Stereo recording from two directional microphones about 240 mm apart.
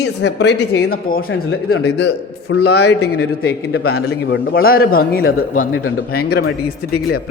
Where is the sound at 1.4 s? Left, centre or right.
Left.